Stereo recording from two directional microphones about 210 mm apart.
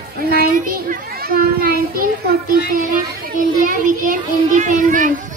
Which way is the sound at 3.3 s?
40° right (ahead or behind).